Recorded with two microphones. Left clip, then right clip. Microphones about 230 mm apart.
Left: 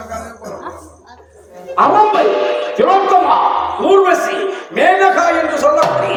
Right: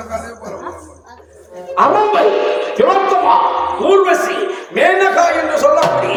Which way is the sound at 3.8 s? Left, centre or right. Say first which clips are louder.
Left 1 dB; centre.